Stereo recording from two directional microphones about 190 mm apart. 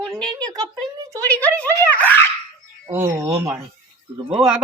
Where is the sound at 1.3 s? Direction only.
10° left (ahead or behind).